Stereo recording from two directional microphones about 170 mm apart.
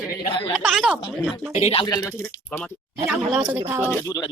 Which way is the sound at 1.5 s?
40° left (ahead or behind).